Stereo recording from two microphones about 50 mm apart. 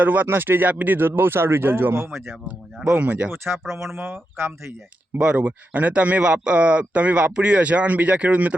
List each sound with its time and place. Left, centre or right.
0.0 s speech: right
0.7 s speech: right
0.9 s speech: right
2.9 s speech: right
3.3 s speech: right
5.2 s speech: right